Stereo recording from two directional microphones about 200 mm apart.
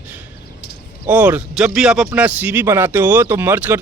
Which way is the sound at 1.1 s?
10° right (ahead or behind).